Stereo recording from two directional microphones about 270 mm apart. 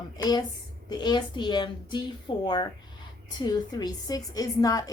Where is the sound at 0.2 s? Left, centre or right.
Centre.